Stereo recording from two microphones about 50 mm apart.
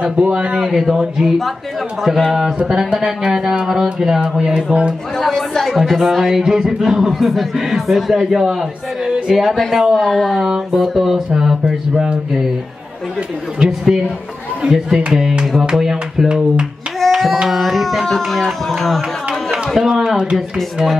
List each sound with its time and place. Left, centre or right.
0.0 s speech: right
0.7 s a sound: centre
5.2 s speech: centre
10.7 s a sound: centre
13.6 s a sound: centre
14.6 s speech: centre
15.1 s a sound: centre
16.3 s speech: centre
17.0 s hands: centre
17.5 s speech: centre
19.5 s a man's voice: centre
20.3 s speech: centre